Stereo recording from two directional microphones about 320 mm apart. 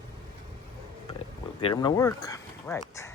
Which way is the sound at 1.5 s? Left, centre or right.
Centre.